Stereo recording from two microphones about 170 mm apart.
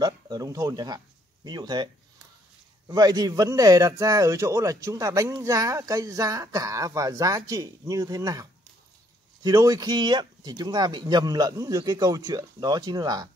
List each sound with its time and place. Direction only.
0.0 s speech: 20° right (ahead or behind)
2.9 s speech: 20° right (ahead or behind)